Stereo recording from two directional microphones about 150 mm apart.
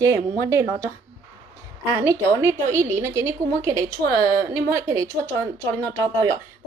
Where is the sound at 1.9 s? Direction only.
20° right (ahead or behind).